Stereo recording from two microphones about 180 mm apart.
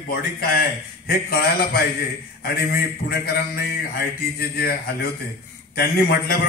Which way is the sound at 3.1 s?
60° left (ahead or behind).